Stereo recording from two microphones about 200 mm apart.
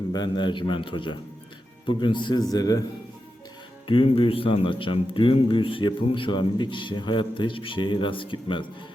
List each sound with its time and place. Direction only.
0.1 s a man's voice: 20° left (ahead or behind)
3.8 s a man's voice: 25° left (ahead or behind)